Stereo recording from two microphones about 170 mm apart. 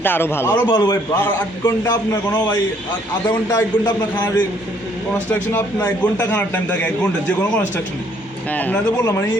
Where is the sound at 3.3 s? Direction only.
25° left (ahead or behind).